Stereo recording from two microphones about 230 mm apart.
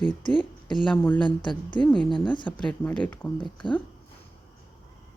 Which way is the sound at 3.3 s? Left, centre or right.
Centre.